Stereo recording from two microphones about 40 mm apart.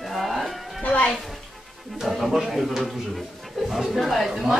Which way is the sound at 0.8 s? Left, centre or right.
Left.